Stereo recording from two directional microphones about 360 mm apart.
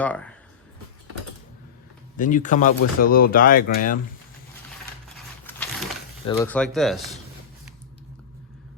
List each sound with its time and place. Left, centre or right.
0.0 s speech: centre
2.1 s speech: left
6.2 s speech: centre